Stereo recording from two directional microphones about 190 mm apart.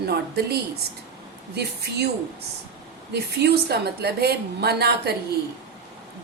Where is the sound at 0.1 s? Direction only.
55° right (ahead or behind).